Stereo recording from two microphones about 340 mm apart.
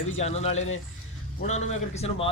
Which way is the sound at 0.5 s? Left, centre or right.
Left.